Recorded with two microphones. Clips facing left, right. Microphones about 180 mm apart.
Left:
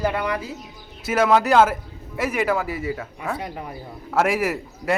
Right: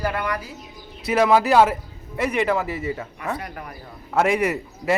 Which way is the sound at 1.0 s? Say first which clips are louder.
Right 1 dB; centre (ahead or behind).